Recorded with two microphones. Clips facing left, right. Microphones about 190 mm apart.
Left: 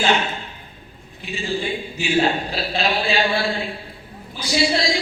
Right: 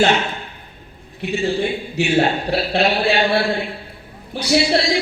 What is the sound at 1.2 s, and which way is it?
A man's voice, 65° right (ahead or behind).